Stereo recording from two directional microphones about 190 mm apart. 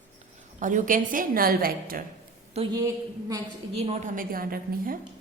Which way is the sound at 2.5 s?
30° right (ahead or behind).